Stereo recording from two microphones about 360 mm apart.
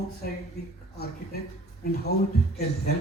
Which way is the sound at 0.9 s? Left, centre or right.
Left.